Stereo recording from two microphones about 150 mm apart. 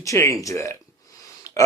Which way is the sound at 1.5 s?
20° left (ahead or behind).